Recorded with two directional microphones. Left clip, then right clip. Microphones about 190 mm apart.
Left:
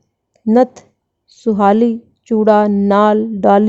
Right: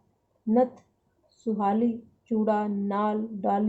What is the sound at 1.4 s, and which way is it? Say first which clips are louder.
A woman's voice: left 14 dB; 65° left (ahead or behind).